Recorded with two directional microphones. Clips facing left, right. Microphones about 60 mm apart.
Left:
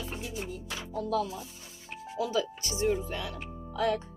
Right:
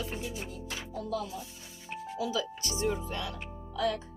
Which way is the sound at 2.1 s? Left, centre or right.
Left.